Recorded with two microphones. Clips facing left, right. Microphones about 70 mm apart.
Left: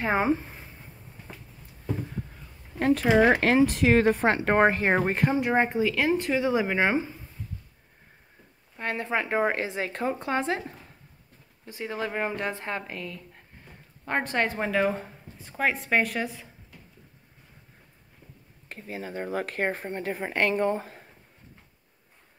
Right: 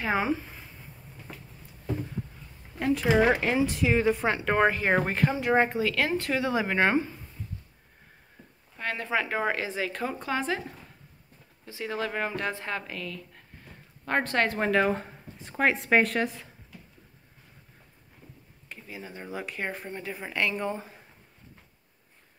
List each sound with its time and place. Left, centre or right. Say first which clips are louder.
0.0 s speech: left 3 dB; left
2.8 s speech: left 3 dB; left
3.3 s speech: left 4 dB; left
4.6 s speech: left 1 dB; left
4.9 s speech: left 2 dB; left
5.7 s speech: left 3 dB; centre
8.7 s speech: left 1 dB; left
11.6 s speech: even; left
14.6 s speech: right 1 dB; centre
18.7 s speech: left 5 dB; left